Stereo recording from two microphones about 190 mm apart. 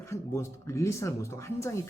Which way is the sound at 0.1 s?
15° left (ahead or behind).